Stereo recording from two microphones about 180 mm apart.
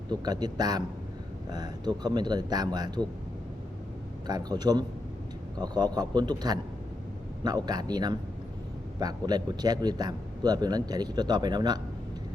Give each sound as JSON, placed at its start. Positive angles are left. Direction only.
{"t": 0.1, "sound": "a man's voice", "side_deg": -20}
{"t": 4.3, "sound": "a man's voice", "side_deg": -20}